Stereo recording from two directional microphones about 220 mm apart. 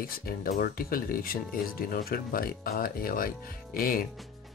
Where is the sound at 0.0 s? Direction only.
40° left (ahead or behind).